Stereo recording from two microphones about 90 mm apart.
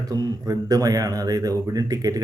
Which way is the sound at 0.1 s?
45° right (ahead or behind).